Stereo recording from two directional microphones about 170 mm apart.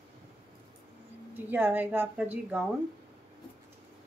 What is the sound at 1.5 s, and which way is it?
A woman's voice, 10° right (ahead or behind).